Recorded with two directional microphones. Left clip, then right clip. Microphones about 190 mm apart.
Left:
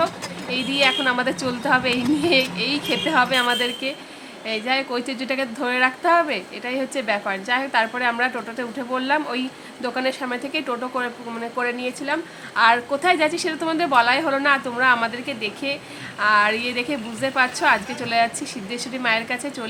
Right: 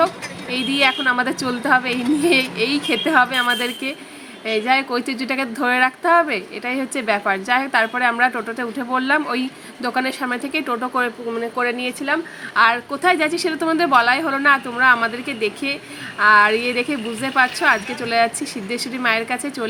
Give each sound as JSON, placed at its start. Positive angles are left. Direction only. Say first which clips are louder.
{"t": 0.5, "sound": "a woman's voice", "louder": "right 2 dB", "side_deg": -15}